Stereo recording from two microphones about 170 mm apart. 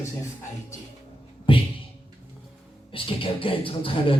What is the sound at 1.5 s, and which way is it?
Music, 30° left (ahead or behind).